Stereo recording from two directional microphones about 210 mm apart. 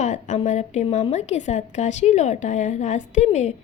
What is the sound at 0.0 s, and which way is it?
A woman's voice, 35° left (ahead or behind).